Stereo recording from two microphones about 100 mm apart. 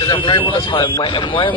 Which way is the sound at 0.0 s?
60° left (ahead or behind).